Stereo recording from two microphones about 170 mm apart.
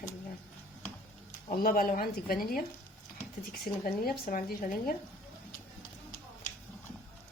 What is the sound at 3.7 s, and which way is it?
Speech, 60° left (ahead or behind).